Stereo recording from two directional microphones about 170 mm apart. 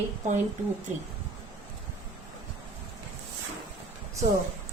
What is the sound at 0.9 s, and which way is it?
Speech, 45° right (ahead or behind).